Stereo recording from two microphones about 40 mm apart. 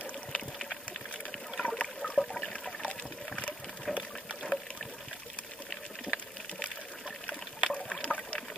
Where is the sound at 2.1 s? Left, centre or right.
Centre.